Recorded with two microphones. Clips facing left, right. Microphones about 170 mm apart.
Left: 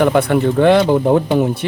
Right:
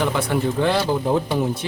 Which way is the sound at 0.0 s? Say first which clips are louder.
Left 8 dB; 60° left (ahead or behind).